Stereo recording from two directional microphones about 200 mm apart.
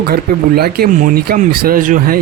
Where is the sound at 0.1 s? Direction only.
50° right (ahead or behind).